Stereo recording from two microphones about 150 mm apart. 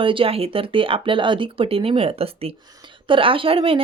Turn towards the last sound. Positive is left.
turn(degrees=-35)  # may be behind; listen again after turning